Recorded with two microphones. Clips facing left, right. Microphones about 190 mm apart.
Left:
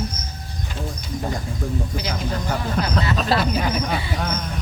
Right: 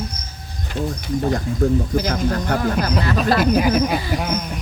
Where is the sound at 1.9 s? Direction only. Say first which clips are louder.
Right 6 dB; 55° right (ahead or behind).